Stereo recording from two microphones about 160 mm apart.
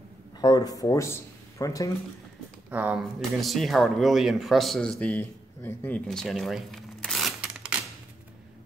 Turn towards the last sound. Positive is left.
turn(degrees=-5)  # may be behind; listen again after turning